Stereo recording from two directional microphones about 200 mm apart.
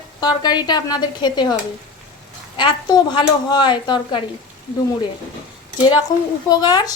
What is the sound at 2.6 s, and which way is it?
A woman's voice, 20° left (ahead or behind).